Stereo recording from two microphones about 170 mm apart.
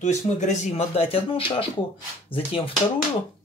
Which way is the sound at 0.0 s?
45° left (ahead or behind).